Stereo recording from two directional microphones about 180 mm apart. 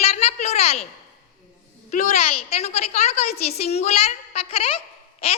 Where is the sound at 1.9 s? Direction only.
45° left (ahead or behind).